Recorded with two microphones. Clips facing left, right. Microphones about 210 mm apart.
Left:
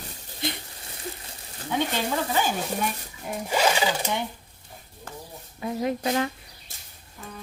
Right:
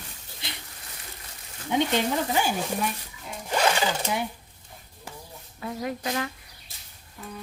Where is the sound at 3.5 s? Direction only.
5° left (ahead or behind).